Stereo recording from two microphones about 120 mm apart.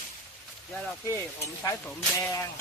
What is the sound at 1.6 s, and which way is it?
Speech, 25° left (ahead or behind).